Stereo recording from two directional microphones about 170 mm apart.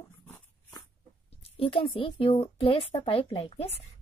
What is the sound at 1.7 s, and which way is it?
A woman's voice, 30° left (ahead or behind).